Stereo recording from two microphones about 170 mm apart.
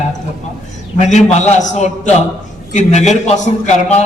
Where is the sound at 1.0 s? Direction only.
40° left (ahead or behind).